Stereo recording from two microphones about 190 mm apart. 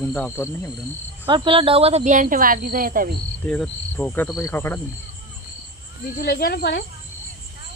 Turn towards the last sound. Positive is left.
turn(degrees=60)  # may be behind; listen again after turning